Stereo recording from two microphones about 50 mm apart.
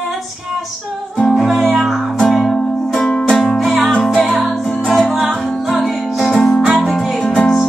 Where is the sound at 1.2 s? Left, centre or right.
Centre.